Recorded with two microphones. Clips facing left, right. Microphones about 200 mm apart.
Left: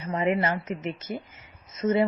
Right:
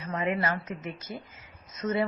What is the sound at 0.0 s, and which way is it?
A woman's voice, 25° left (ahead or behind).